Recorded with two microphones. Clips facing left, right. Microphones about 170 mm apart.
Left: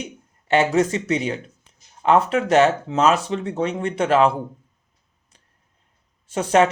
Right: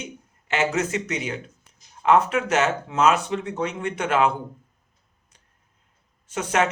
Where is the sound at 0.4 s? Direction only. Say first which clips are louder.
Left 6 dB; 35° left (ahead or behind).